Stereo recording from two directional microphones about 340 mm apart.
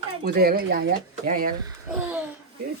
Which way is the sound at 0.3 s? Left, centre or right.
Right.